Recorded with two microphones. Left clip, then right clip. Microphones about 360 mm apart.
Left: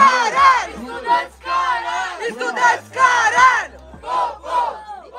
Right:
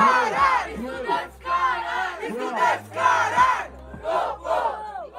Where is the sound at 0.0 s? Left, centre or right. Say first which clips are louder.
Left 6 dB; left.